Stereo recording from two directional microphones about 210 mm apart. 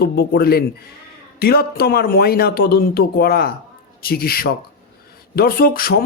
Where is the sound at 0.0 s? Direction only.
50° left (ahead or behind).